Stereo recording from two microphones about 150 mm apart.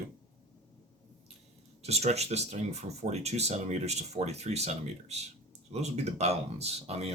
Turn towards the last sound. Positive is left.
turn(degrees=-45)  # may be behind; listen again after turning